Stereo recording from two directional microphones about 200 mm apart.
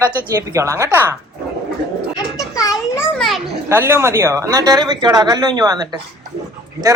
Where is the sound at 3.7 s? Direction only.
10° right (ahead or behind).